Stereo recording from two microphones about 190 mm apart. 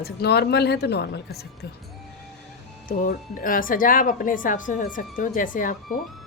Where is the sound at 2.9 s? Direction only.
45° left (ahead or behind).